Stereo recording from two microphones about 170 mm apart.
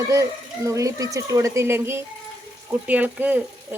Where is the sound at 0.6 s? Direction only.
20° right (ahead or behind).